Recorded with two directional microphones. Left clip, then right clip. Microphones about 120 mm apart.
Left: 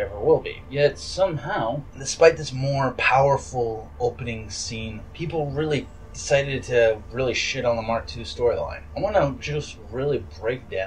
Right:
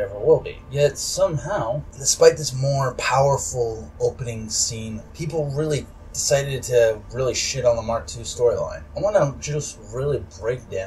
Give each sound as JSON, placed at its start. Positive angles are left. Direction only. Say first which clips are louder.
{"t": 0.3, "sound": "speech", "louder": "right 2 dB", "side_deg": 0}